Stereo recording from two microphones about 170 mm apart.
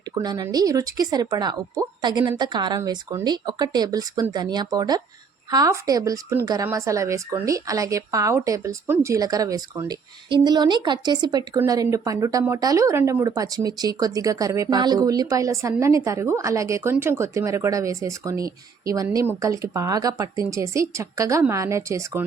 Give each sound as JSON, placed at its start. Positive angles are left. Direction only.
{"t": 0.1, "sound": "speech", "side_deg": -25}